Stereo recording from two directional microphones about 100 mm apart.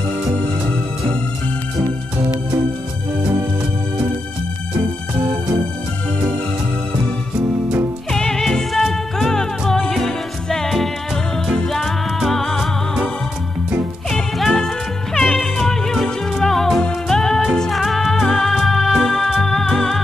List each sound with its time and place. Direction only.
4.7 s music: 15° right (ahead or behind)
8.1 s music: 5° left (ahead or behind)
14.1 s music: 5° left (ahead or behind)